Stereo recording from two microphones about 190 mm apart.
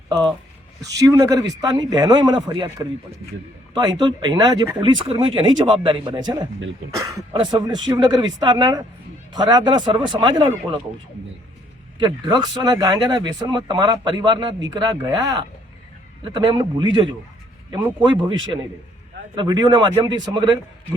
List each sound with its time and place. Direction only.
0.9 s speech: 15° right (ahead or behind)
11.9 s a man's voice: 25° right (ahead or behind)
19.4 s speech: 20° right (ahead or behind)